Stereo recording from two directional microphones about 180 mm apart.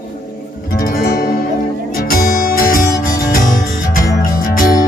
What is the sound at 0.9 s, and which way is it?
Music, 55° left (ahead or behind).